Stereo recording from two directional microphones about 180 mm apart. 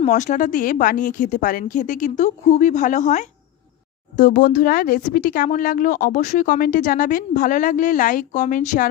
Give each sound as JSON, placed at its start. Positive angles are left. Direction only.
{"t": 0.0, "sound": "a woman's voice", "side_deg": 40}
{"t": 4.2, "sound": "a woman's voice", "side_deg": 55}